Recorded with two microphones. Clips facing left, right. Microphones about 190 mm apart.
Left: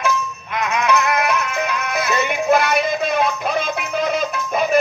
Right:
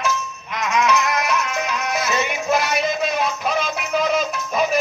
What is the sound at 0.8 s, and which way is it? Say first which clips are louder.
Music: left 2 dB; 55° left (ahead or behind).